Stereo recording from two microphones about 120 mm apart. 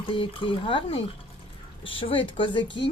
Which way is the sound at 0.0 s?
45° left (ahead or behind).